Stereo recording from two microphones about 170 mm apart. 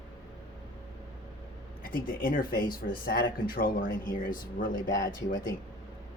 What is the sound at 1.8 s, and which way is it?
Speech, 55° left (ahead or behind).